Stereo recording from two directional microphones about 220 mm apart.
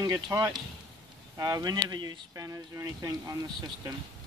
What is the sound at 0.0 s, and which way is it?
Speech, 15° right (ahead or behind).